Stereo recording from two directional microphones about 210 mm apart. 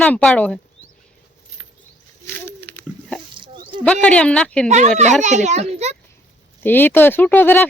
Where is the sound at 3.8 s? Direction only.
5° left (ahead or behind).